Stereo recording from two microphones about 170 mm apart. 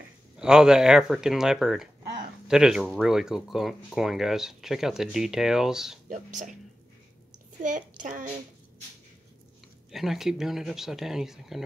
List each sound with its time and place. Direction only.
0.4 s speech: 5° right (ahead or behind)
6.0 s speech: 50° right (ahead or behind)
7.6 s speech: 50° right (ahead or behind)
9.8 s speech: centre (ahead or behind)